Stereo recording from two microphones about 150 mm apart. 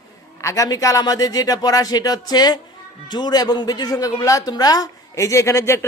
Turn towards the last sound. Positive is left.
turn(degrees=20)  # may be behind; listen again after turning